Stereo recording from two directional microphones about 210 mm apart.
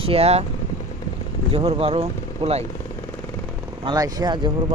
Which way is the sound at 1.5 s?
30° right (ahead or behind).